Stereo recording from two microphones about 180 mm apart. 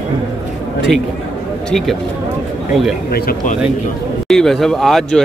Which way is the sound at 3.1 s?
55° left (ahead or behind).